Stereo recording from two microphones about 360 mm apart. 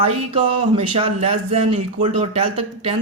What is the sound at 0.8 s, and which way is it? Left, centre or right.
A man's voice, centre.